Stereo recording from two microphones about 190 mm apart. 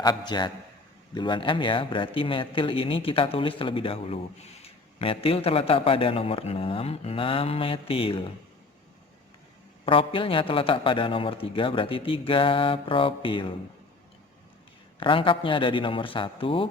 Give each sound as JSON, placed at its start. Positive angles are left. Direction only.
{"t": 0.0, "sound": "a man's voice", "side_deg": 20}
{"t": 9.8, "sound": "a man's voice", "side_deg": 30}
{"t": 14.9, "sound": "a man's voice", "side_deg": 25}